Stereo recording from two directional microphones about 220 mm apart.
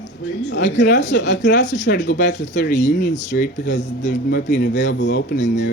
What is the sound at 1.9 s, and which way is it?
Speech, 50° left (ahead or behind).